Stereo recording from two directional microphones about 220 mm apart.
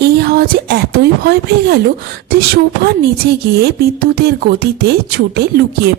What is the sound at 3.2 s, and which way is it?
Speech, 45° right (ahead or behind).